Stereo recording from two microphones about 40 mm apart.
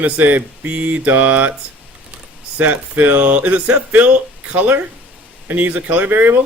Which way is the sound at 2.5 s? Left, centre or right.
Right.